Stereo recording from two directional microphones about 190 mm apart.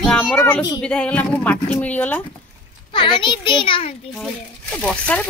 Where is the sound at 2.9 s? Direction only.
25° left (ahead or behind).